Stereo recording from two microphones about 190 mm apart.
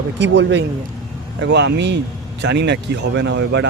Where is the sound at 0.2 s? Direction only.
70° right (ahead or behind).